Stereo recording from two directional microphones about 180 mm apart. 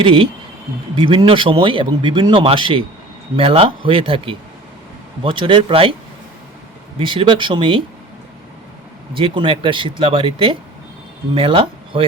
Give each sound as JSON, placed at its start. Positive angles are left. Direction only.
{"t": 0.0, "sound": "speech", "side_deg": -30}
{"t": 7.0, "sound": "speech", "side_deg": -30}
{"t": 9.1, "sound": "speech", "side_deg": -30}